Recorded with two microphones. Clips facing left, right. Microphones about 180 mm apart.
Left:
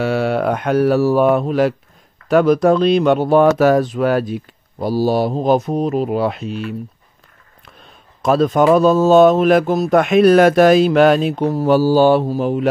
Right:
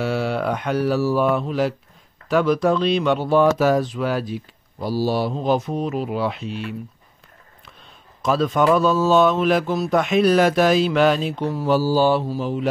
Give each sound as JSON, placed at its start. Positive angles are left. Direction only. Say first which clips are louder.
{"t": 0.0, "sound": "mantra", "louder": "left 5 dB", "side_deg": 60}
{"t": 2.2, "sound": "speech", "louder": "left 6 dB", "side_deg": 50}
{"t": 8.2, "sound": "speech", "louder": "left 5 dB", "side_deg": 50}